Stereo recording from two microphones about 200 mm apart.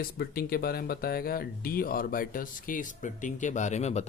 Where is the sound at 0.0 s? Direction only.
50° left (ahead or behind).